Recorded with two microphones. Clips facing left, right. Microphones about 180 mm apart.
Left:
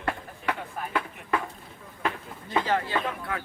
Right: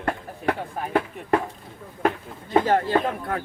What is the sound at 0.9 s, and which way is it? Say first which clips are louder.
Chop: right 7 dB; 45° right (ahead or behind).